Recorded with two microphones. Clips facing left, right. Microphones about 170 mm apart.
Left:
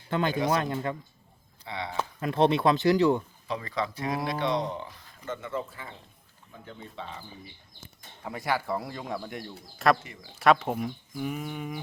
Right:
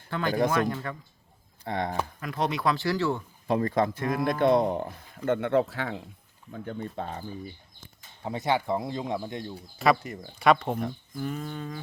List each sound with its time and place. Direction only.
0.1 s speech: 20° left (ahead or behind)
1.6 s speech: 45° right (ahead or behind)
2.2 s speech: 25° left (ahead or behind)
3.4 s speech: 50° right (ahead or behind); by 6.0 s 80° right
6.5 s speech: 50° right (ahead or behind)
8.2 s speech: 25° right (ahead or behind)
9.7 s speech: centre (ahead or behind)
10.0 s speech: 45° right (ahead or behind)
10.3 s speech: centre (ahead or behind)
10.8 s a sound: 5° left (ahead or behind)